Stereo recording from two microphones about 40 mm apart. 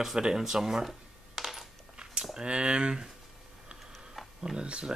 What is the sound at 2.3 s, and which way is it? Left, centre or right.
Speech, right.